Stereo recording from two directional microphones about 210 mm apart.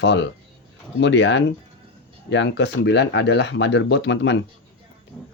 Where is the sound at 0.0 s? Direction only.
60° left (ahead or behind).